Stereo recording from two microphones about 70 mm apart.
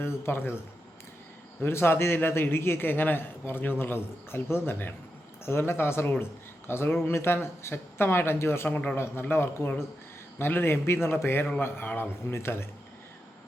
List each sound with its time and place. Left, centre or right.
0.0 s speech: left
1.6 s a man's voice: left
8.7 s speech: centre
9.0 s a man's voice: left